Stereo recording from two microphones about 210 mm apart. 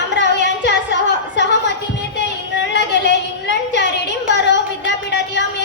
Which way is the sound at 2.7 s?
55° left (ahead or behind).